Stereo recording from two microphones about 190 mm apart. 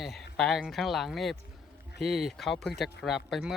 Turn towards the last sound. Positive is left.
turn(degrees=0)  # may be behind; listen again after turning